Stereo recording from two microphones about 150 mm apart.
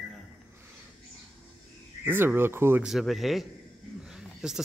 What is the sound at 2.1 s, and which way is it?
Speech, 15° right (ahead or behind).